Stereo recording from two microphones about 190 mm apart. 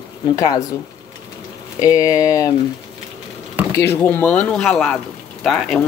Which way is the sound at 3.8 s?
10° left (ahead or behind).